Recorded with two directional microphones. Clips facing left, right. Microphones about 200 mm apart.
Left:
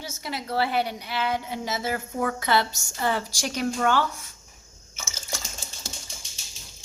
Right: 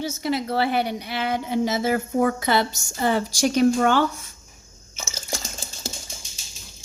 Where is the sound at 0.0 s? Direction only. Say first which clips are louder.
Right 9 dB; 25° right (ahead or behind).